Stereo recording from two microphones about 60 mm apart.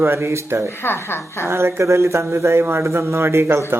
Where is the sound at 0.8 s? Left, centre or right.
Left.